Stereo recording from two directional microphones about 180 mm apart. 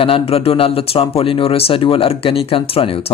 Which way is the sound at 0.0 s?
30° left (ahead or behind).